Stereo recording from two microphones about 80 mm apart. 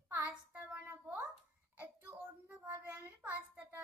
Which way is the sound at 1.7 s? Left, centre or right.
Right.